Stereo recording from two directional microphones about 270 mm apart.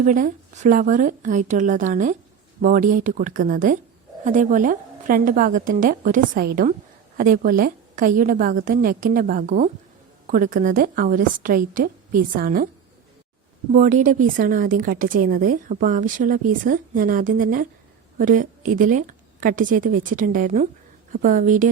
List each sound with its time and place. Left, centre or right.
0.0 s a woman's voice: right
13.7 s a woman's voice: right